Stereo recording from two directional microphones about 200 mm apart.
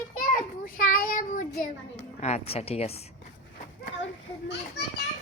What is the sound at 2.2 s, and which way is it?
Speech, 35° left (ahead or behind).